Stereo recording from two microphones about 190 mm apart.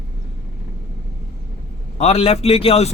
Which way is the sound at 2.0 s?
30° left (ahead or behind).